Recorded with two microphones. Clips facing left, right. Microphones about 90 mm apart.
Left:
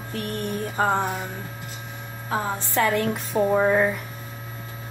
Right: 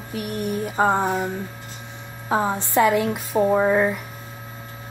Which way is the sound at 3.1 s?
5° right (ahead or behind).